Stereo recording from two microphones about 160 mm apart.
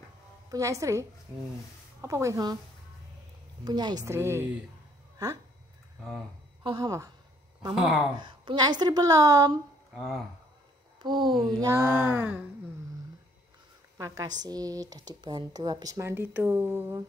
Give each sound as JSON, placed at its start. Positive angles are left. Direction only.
{"t": 0.5, "sound": "speech", "side_deg": -20}
{"t": 3.6, "sound": "speech", "side_deg": -25}
{"t": 6.6, "sound": "speech", "side_deg": -25}
{"t": 7.7, "sound": "speech", "side_deg": -5}
{"t": 8.2, "sound": "speech", "side_deg": -30}
{"t": 9.9, "sound": "speech", "side_deg": 0}
{"t": 11.0, "sound": "speech", "side_deg": -30}
{"t": 11.6, "sound": "a sound", "side_deg": -15}
{"t": 13.9, "sound": "speech", "side_deg": -20}